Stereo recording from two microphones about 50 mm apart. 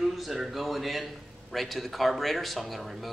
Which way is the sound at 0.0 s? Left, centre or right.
Centre.